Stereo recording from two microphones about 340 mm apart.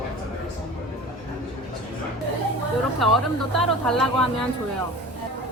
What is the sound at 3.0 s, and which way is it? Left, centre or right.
Speech, centre.